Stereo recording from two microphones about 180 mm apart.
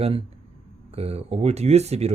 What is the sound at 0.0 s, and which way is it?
Speech, 35° right (ahead or behind).